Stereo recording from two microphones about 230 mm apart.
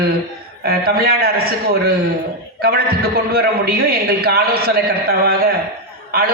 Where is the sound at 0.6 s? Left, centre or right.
Right.